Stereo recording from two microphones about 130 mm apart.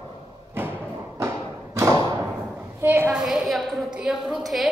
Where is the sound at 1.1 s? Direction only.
20° right (ahead or behind).